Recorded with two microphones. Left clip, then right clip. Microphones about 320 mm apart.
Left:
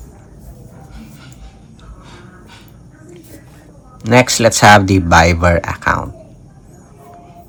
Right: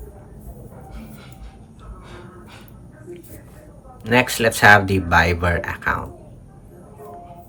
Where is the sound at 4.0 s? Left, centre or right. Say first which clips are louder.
Left 7 dB; centre.